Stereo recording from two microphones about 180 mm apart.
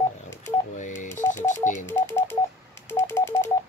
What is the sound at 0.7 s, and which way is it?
Telephone dialing, 45° left (ahead or behind).